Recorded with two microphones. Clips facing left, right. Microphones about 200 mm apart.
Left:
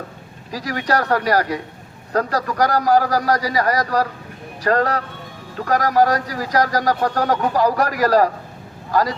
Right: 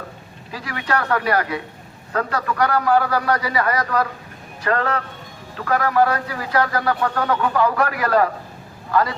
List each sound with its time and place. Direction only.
0.5 s a man's voice: 40° left (ahead or behind)